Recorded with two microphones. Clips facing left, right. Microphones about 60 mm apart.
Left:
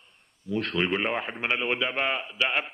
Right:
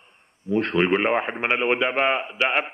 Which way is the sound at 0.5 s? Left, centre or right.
Right.